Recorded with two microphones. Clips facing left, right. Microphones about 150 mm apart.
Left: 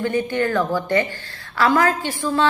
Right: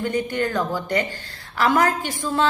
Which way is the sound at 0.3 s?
15° right (ahead or behind).